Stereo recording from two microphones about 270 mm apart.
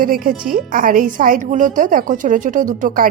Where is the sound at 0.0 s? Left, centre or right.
Right.